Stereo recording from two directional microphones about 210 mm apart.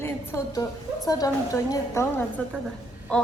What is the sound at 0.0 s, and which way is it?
A woman's voice, 10° left (ahead or behind).